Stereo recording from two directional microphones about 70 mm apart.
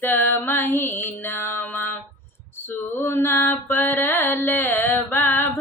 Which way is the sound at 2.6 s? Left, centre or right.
Left.